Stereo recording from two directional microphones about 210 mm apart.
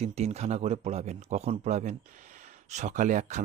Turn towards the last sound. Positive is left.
turn(degrees=-35)  # may be behind; listen again after turning